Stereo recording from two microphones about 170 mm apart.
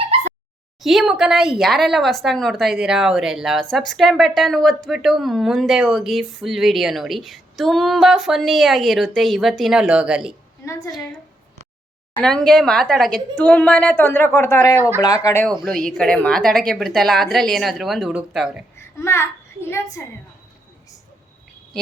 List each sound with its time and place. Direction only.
0.8 s speech: centre (ahead or behind)
10.6 s a woman's voice: 15° left (ahead or behind)
12.1 s a woman's voice: 5° left (ahead or behind)
14.8 s speech: 15° right (ahead or behind)
15.0 s speech: 20° left (ahead or behind)
15.6 s speech: centre (ahead or behind)
18.8 s a sound: 15° left (ahead or behind)